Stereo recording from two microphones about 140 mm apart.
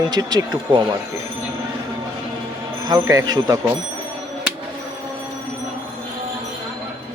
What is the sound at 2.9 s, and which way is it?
Speech, 25° right (ahead or behind).